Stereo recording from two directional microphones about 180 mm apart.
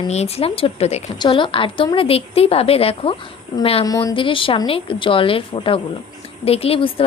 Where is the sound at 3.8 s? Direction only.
20° left (ahead or behind).